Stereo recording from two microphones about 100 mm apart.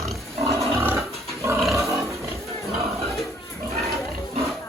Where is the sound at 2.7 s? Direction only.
Centre (ahead or behind).